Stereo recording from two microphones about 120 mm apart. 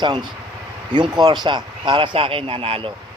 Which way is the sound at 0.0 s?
40° right (ahead or behind).